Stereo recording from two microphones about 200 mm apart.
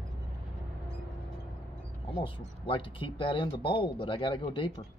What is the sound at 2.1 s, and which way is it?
Speech, 25° left (ahead or behind).